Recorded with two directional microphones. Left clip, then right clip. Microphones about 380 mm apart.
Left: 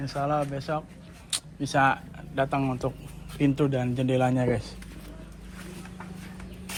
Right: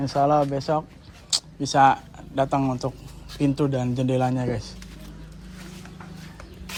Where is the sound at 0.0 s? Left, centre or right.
Centre.